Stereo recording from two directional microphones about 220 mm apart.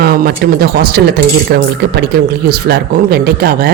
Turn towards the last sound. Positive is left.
turn(degrees=-45)  # may be behind; listen again after turning